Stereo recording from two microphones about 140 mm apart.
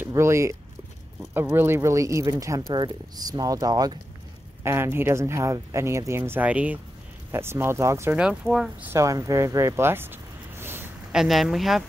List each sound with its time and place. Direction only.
0.0 s speech: 20° right (ahead or behind)
8.2 s speech: 5° right (ahead or behind)
8.9 s a sound: 20° right (ahead or behind)
11.1 s speech: 5° right (ahead or behind)